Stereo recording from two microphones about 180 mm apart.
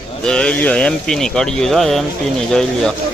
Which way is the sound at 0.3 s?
5° left (ahead or behind).